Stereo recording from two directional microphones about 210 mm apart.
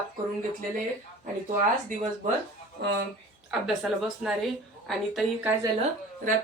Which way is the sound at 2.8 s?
50° right (ahead or behind).